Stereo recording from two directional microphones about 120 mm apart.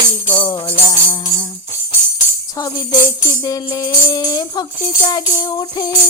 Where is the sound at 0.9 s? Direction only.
30° left (ahead or behind).